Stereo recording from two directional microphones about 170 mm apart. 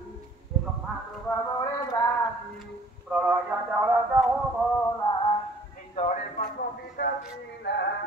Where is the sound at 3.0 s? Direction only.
5° right (ahead or behind).